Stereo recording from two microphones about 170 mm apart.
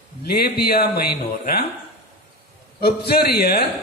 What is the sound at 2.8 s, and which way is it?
Speech, 65° left (ahead or behind).